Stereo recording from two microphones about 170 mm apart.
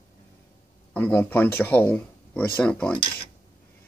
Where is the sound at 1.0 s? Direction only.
10° left (ahead or behind).